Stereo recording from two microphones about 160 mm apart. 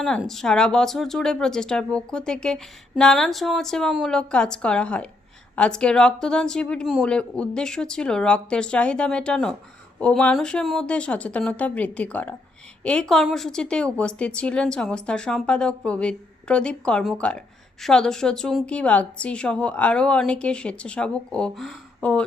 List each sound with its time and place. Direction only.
0.0 s a woman's voice: centre (ahead or behind)